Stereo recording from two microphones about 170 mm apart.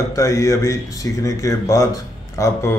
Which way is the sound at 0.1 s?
20° left (ahead or behind).